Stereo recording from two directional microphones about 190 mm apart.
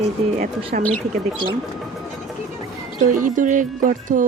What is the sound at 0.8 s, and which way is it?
Speech, 5° left (ahead or behind).